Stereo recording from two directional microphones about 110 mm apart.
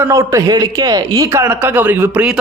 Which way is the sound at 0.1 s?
30° right (ahead or behind).